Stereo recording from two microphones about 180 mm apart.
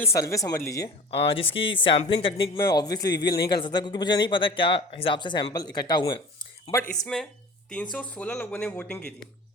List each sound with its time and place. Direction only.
0.0 s speech: 15° left (ahead or behind)
1.1 s a man's voice: 30° left (ahead or behind); by 6.9 s 15° left (ahead or behind)
6.9 s speech: 5° left (ahead or behind)